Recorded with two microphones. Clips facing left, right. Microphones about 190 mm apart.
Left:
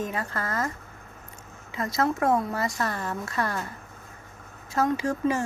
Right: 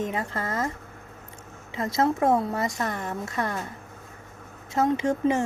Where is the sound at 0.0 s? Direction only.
25° right (ahead or behind).